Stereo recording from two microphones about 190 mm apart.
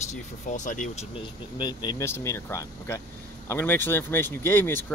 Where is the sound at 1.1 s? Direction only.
25° left (ahead or behind).